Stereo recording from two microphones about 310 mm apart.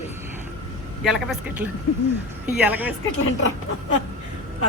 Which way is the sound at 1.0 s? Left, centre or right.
Centre.